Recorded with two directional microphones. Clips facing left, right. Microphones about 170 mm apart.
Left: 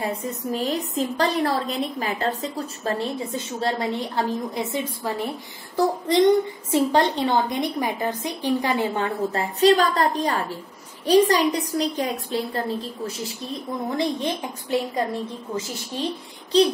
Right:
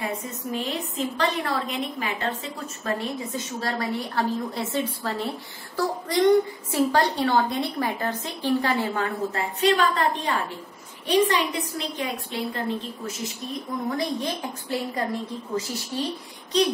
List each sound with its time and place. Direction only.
0.5 s a woman's voice: 40° left (ahead or behind)
3.6 s a woman's voice: 20° left (ahead or behind)
9.4 s a woman's voice: 35° left (ahead or behind)
13.8 s a woman's voice: 25° left (ahead or behind)
16.5 s a woman's voice: 30° left (ahead or behind)